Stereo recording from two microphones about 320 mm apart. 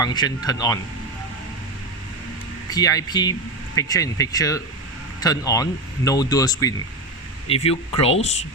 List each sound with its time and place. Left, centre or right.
0.0 s speech: centre
2.6 s speech: centre